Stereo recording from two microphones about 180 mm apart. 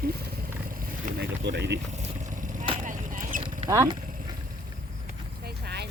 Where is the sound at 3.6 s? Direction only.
20° right (ahead or behind).